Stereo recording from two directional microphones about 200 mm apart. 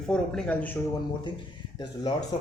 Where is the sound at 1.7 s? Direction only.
20° left (ahead or behind).